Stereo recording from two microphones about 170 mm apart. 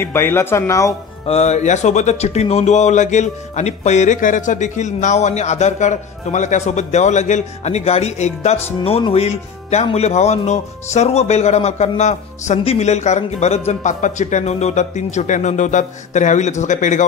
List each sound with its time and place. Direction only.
0.0 s speech: 15° left (ahead or behind)
1.2 s speech: 40° left (ahead or behind)